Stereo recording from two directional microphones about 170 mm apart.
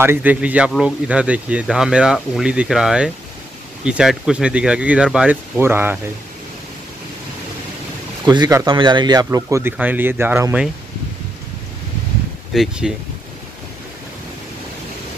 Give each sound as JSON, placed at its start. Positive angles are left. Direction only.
{"t": 0.0, "sound": "speech", "side_deg": -10}
{"t": 8.3, "sound": "speech", "side_deg": -20}
{"t": 12.5, "sound": "speech", "side_deg": -5}